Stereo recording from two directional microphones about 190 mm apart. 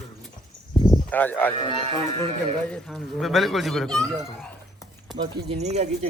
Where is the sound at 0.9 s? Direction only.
10° left (ahead or behind).